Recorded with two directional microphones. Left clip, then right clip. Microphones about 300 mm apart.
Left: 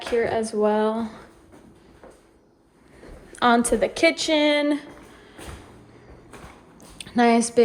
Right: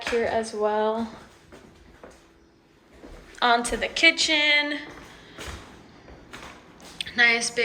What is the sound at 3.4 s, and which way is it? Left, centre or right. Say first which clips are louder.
A woman's voice: left 3 dB; left.